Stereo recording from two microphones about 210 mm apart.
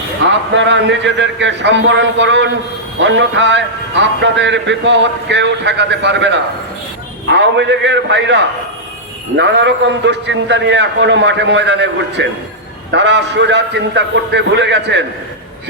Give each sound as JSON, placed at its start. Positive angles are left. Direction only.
{"t": 0.5, "sound": "a man's voice", "side_deg": -60}
{"t": 7.5, "sound": "a man's voice", "side_deg": -60}
{"t": 9.4, "sound": "a man's voice", "side_deg": -55}